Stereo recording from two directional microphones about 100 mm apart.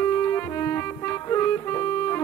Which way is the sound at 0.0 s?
20° left (ahead or behind).